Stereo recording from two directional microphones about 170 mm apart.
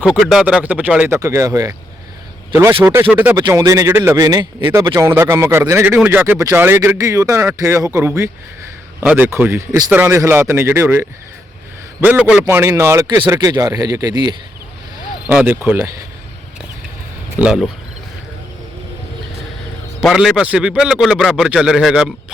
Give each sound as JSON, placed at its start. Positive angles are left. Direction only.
{"t": 0.0, "sound": "a man's voice", "side_deg": -5}
{"t": 3.3, "sound": "a man's voice", "side_deg": -20}
{"t": 15.3, "sound": "a man's voice", "side_deg": -10}
{"t": 17.3, "sound": "a man's voice", "side_deg": -5}
{"t": 20.0, "sound": "a man's voice", "side_deg": 0}